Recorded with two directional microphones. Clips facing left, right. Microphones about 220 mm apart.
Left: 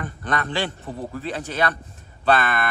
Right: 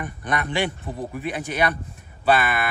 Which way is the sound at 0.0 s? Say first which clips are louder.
Even; 15° right (ahead or behind).